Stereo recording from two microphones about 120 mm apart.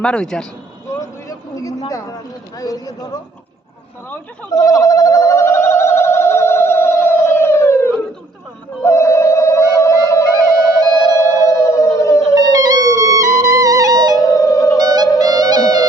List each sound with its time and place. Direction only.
0.0 s speech: 5° left (ahead or behind)
0.9 s a sound: 25° left (ahead or behind)
4.5 s a sound: 30° left (ahead or behind)
8.8 s music: 25° left (ahead or behind)
12.3 s music: 35° right (ahead or behind)
14.2 s music: 30° left (ahead or behind)
14.8 s music: 35° right (ahead or behind)